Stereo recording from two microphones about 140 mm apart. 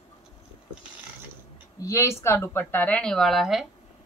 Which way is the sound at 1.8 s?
20° left (ahead or behind).